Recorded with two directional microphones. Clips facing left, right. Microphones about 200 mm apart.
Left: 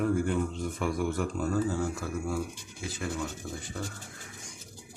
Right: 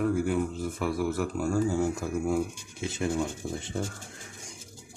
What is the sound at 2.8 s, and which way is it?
Rub, 25° right (ahead or behind).